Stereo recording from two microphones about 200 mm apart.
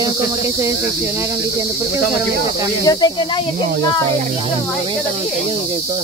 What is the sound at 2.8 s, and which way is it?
Speech, 20° left (ahead or behind).